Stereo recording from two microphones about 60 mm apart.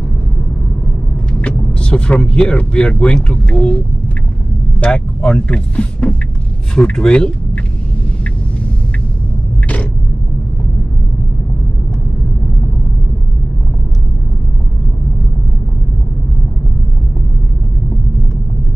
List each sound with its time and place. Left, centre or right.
1.4 s vehicle: centre
2.5 s speech: centre